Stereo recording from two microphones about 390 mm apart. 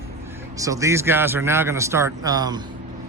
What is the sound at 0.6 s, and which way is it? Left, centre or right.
A man's voice, centre.